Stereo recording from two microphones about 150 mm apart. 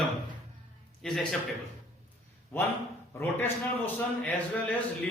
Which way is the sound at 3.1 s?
15° left (ahead or behind).